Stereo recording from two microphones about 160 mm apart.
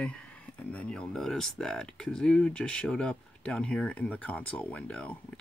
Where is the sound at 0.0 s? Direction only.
5° left (ahead or behind).